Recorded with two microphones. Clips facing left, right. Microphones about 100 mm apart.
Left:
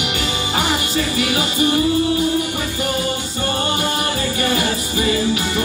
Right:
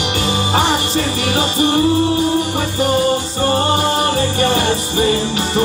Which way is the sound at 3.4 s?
35° right (ahead or behind).